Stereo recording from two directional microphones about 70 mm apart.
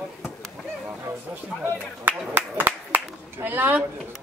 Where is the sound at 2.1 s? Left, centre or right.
Right.